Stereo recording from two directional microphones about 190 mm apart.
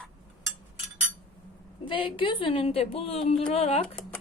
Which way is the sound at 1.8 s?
25° left (ahead or behind).